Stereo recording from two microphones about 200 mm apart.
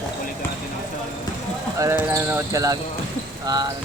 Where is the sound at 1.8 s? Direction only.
15° right (ahead or behind).